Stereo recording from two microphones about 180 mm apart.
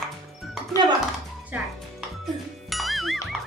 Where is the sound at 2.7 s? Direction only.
Centre (ahead or behind).